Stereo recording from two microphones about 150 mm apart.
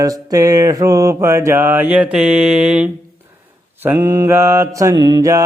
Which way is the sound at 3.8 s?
20° right (ahead or behind).